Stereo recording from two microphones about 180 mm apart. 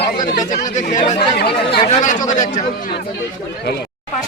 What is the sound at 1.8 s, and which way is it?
Speech, 40° left (ahead or behind).